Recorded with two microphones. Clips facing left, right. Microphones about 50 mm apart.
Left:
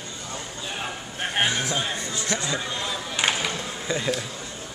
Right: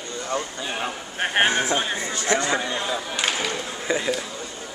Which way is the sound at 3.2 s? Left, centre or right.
Centre.